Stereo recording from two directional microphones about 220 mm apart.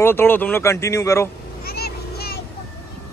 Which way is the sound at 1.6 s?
45° left (ahead or behind).